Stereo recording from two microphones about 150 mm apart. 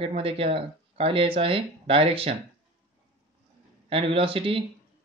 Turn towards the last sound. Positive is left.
turn(degrees=-35)  # may be behind; listen again after turning